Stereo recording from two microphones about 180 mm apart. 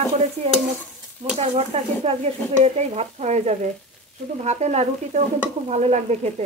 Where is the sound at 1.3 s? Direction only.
35° right (ahead or behind).